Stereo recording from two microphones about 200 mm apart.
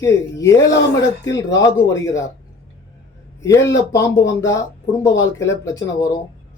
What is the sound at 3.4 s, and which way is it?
Speech, 15° left (ahead or behind).